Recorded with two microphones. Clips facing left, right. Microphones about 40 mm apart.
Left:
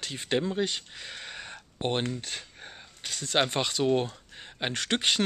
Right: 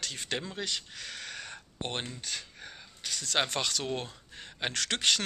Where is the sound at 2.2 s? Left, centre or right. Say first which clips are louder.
Left 1 dB; left.